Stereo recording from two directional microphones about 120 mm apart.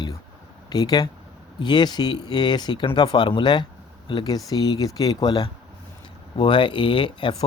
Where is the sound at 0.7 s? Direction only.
35° left (ahead or behind).